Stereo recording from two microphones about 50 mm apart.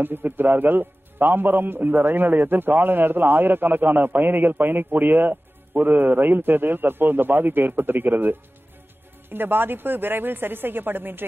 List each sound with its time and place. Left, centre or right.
0.0 s a man's voice: right